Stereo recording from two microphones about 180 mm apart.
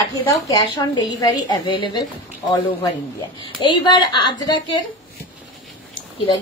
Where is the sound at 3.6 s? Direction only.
25° left (ahead or behind).